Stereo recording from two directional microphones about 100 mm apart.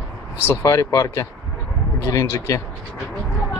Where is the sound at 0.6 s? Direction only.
30° left (ahead or behind).